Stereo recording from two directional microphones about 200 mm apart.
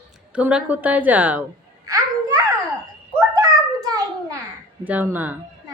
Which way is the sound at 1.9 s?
15° right (ahead or behind).